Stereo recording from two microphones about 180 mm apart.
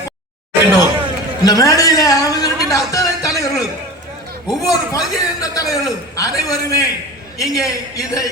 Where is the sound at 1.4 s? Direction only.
20° left (ahead or behind).